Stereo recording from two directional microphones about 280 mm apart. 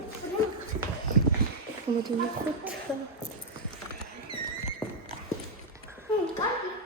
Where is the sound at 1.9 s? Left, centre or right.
Centre.